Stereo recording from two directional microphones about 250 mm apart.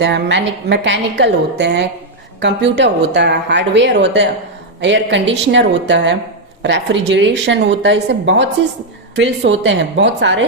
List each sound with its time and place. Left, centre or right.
0.0 s a woman's voice: right